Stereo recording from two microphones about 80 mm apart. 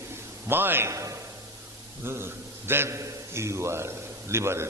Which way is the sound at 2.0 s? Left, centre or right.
Right.